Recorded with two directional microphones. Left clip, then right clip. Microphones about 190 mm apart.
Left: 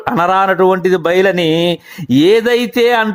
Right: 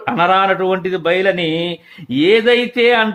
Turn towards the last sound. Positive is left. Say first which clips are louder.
# left 1 dB
turn(degrees=35)  # may be behind; listen again after turning